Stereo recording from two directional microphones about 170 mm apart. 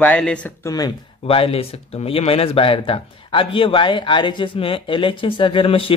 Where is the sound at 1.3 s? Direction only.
35° left (ahead or behind).